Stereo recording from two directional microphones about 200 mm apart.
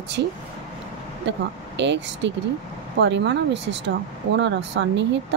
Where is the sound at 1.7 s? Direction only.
60° right (ahead or behind).